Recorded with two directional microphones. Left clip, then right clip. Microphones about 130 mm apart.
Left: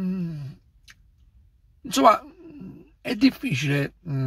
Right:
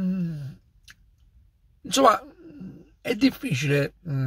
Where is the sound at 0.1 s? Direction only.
20° right (ahead or behind).